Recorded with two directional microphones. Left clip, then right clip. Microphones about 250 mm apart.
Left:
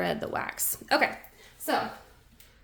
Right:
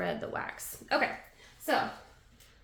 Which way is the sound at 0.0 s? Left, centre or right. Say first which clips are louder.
Left 4 dB; left.